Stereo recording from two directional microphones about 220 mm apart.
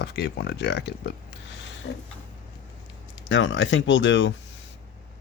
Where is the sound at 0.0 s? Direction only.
50° left (ahead or behind).